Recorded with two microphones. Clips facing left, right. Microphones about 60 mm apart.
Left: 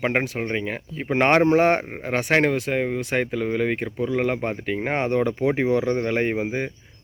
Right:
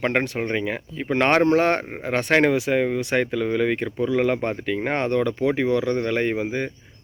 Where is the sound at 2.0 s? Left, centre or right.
Centre.